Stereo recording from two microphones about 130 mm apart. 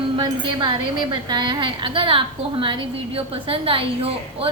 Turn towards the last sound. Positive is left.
turn(degrees=-45)  # may be behind; listen again after turning